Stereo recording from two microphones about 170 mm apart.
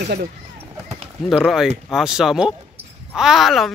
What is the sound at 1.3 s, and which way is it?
Speech, centre (ahead or behind).